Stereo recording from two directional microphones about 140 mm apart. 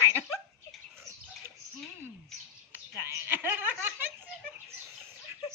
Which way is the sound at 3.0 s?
15° right (ahead or behind).